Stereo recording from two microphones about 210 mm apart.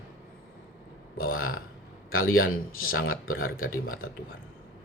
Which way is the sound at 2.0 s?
75° left (ahead or behind).